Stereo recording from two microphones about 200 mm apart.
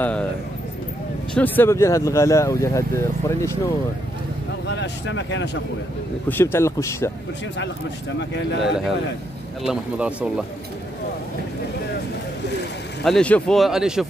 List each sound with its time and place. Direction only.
0.0 s speech: 5° left (ahead or behind)
1.3 s speech: 10° left (ahead or behind)
4.6 s speech: 60° left (ahead or behind)
6.2 s speech: 10° left (ahead or behind)
8.2 s speech: 60° left (ahead or behind)
9.6 s speech: 5° right (ahead or behind)
13.0 s speech: 5° left (ahead or behind)